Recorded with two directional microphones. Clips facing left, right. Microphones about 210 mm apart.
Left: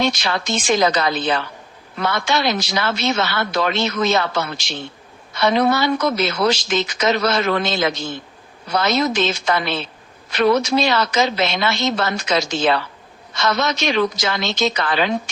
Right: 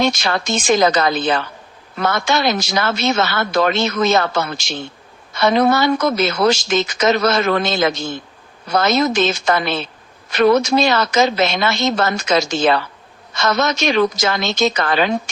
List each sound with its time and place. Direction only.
0.0 s a woman's voice: 45° right (ahead or behind)